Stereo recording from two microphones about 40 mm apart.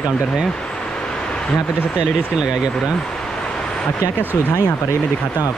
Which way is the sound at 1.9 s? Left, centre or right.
Right.